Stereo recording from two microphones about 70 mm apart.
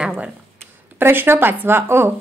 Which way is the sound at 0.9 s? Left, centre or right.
Right.